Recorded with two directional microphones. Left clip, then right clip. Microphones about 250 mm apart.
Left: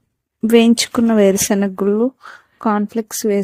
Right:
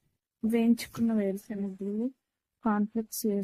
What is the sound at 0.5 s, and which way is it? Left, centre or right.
Speech, left.